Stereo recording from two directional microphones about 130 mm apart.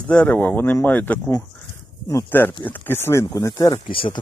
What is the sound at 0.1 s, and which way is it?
Speech, 10° left (ahead or behind).